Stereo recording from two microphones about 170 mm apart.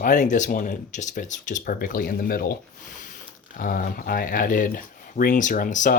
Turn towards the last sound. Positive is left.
turn(degrees=50)  # may be behind; listen again after turning